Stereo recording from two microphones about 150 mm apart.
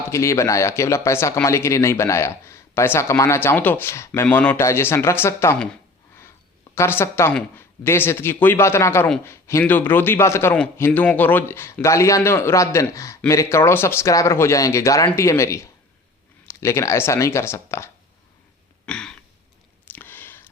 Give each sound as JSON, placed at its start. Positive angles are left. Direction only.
{"t": 0.1, "sound": "a man's voice", "side_deg": 20}
{"t": 6.7, "sound": "a man's voice", "side_deg": 15}
{"t": 18.9, "sound": "throat clearing", "side_deg": 5}
{"t": 19.9, "sound": "a sound", "side_deg": 15}